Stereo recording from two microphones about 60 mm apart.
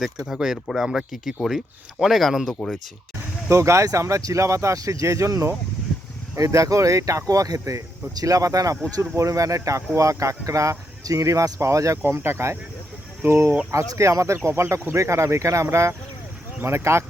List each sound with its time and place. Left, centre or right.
0.3 s speech: centre
3.5 s speech: right
8.1 s speech: right
12.0 s speech: right
13.7 s speech: right